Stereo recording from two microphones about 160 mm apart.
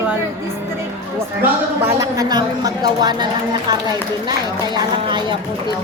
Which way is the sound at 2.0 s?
20° right (ahead or behind).